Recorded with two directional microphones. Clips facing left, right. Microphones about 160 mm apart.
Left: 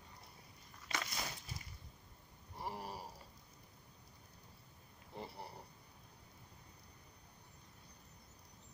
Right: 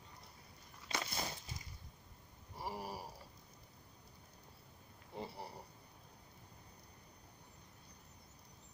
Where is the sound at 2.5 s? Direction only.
5° right (ahead or behind).